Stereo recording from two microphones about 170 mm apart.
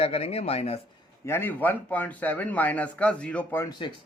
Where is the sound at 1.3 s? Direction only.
10° left (ahead or behind).